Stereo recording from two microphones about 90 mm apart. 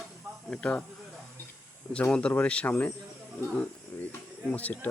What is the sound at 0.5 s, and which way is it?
Speech, 10° left (ahead or behind).